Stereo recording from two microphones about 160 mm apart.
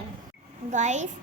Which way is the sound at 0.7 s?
45° right (ahead or behind).